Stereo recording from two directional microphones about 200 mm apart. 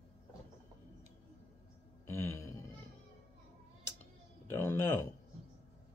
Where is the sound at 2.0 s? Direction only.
10° left (ahead or behind).